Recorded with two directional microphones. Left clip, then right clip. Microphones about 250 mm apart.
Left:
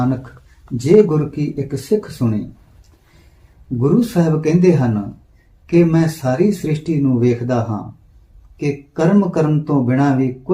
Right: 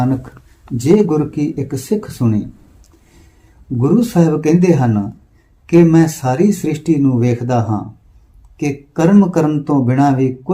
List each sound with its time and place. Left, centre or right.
0.6 s speech: right
3.8 s speech: right